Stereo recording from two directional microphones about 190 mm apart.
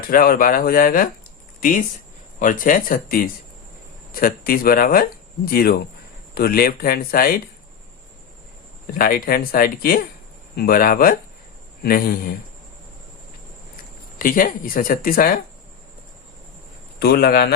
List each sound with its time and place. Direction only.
0.1 s speech: 50° left (ahead or behind)
2.4 s speech: 45° left (ahead or behind)
8.9 s speech: 50° left (ahead or behind)
14.2 s speech: 45° left (ahead or behind)
17.0 s a man's voice: 55° left (ahead or behind)